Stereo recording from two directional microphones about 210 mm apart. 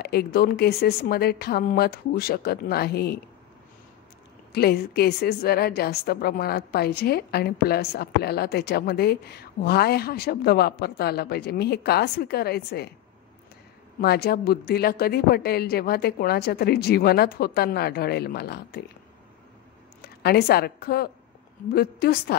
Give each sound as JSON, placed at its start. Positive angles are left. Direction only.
{"t": 0.0, "sound": "a woman's voice", "side_deg": 50}
{"t": 4.5, "sound": "a woman's voice", "side_deg": 50}
{"t": 14.0, "sound": "a woman's voice", "side_deg": 50}
{"t": 20.2, "sound": "a woman's voice", "side_deg": 50}